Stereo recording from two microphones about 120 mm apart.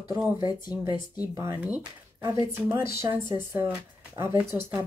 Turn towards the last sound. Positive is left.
turn(degrees=-15)  # may be behind; listen again after turning